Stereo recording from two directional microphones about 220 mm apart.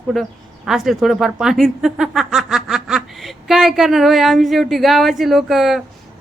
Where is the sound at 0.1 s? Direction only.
Centre (ahead or behind).